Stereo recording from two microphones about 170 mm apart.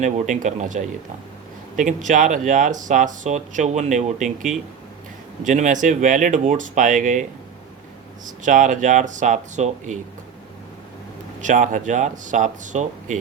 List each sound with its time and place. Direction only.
0.0 s speech: 45° right (ahead or behind)
8.4 s speech: 50° right (ahead or behind)
11.3 s speech: 50° right (ahead or behind)